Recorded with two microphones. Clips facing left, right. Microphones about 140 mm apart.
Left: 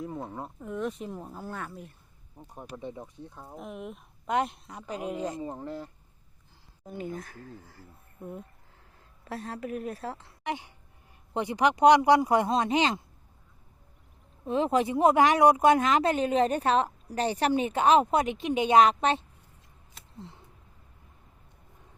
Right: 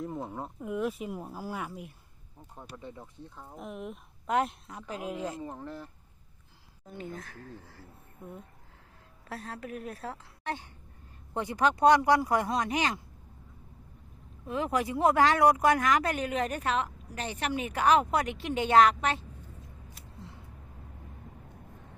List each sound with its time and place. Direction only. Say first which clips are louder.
0.0 s speech: even; centre (ahead or behind)
2.6 s speech: left 5 dB; 15° left (ahead or behind)
3.5 s a woman's voice: even; centre (ahead or behind)
5.4 s speech: left 4 dB; 15° left (ahead or behind)
6.8 s a woman's voice: left 4 dB; 5° left (ahead or behind)
9.2 s a woman's voice: left 4 dB; centre (ahead or behind); by 13.0 s 25° left (ahead or behind)
14.4 s speech: left 5 dB; 25° left (ahead or behind)